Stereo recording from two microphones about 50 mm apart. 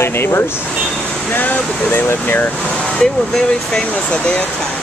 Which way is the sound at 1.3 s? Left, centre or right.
Left.